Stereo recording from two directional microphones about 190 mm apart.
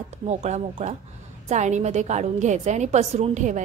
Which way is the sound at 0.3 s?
35° right (ahead or behind).